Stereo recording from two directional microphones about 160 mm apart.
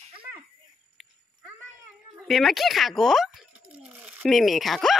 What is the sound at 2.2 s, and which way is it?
A child's voice, centre (ahead or behind).